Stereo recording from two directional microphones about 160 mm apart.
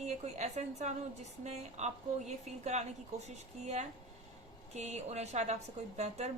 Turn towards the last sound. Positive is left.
turn(degrees=-45)  # may be behind; listen again after turning